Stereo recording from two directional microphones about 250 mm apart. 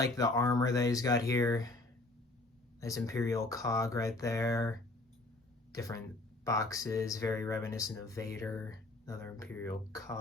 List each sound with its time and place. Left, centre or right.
0.0 s speech: centre
2.8 s speech: centre
5.7 s speech: centre